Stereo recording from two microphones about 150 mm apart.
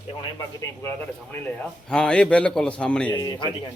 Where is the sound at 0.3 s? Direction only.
20° left (ahead or behind).